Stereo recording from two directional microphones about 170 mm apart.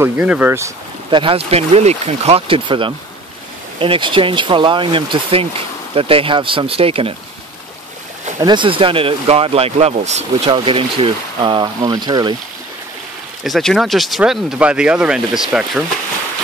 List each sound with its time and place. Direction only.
0.0 s speech: 10° right (ahead or behind)
1.1 s speech: 30° right (ahead or behind)
8.4 s speech: 25° right (ahead or behind)
13.4 s speech: centre (ahead or behind)